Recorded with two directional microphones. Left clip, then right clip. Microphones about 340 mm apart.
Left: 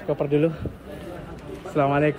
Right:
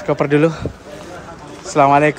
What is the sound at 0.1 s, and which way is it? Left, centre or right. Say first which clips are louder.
Speech: right 7 dB; right.